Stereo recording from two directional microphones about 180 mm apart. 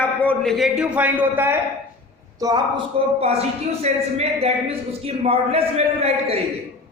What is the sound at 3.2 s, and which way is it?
A man's voice, 35° right (ahead or behind).